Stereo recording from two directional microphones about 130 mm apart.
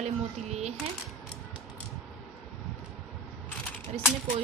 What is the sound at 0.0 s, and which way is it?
Speech, 60° right (ahead or behind).